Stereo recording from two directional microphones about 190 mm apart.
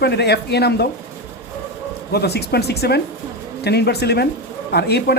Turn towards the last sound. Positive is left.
turn(degrees=60)  # may be behind; listen again after turning